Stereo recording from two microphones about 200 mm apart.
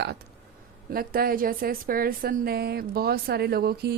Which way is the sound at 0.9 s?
45° right (ahead or behind).